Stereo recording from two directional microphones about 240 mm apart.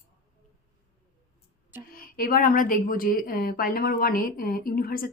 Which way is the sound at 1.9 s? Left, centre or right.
Left.